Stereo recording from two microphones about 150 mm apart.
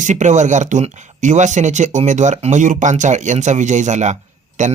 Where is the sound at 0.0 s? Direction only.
55° right (ahead or behind).